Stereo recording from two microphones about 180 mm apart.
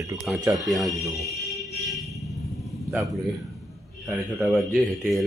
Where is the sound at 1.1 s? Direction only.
Centre (ahead or behind).